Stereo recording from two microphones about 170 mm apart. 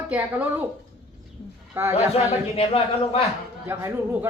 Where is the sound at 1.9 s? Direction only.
35° left (ahead or behind).